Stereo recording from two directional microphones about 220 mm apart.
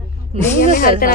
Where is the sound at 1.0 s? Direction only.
40° left (ahead or behind).